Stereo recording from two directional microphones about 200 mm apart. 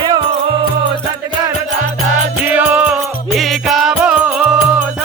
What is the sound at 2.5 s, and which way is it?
Music, 10° right (ahead or behind).